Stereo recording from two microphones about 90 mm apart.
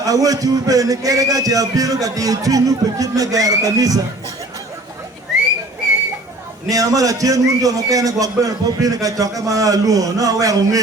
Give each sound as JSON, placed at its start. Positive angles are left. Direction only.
{"t": 0.0, "sound": "a man's voice", "side_deg": -40}
{"t": 6.7, "sound": "a man's voice", "side_deg": -40}